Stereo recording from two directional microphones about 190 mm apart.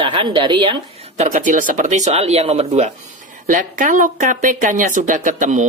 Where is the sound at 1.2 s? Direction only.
40° right (ahead or behind).